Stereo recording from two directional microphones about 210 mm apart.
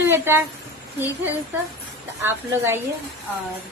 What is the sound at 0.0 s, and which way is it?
Speech, 10° right (ahead or behind).